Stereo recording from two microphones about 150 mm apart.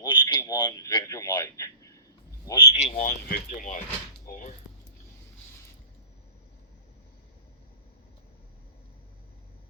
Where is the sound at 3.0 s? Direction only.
70° left (ahead or behind).